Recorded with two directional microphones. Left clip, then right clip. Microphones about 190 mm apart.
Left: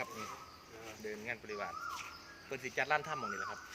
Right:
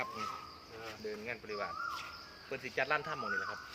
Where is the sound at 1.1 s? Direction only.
45° left (ahead or behind).